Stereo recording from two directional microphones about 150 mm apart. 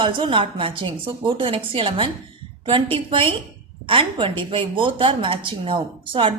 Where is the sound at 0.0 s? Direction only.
35° right (ahead or behind).